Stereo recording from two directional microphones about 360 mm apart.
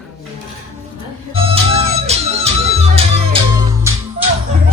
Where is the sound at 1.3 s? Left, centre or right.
Centre.